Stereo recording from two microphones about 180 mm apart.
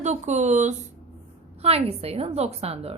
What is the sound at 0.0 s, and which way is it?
A woman's voice, 40° right (ahead or behind).